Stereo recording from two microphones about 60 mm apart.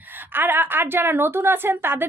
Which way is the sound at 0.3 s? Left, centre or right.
Right.